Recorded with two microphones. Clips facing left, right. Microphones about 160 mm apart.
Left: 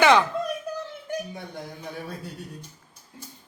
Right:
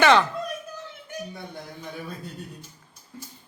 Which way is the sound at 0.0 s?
15° left (ahead or behind).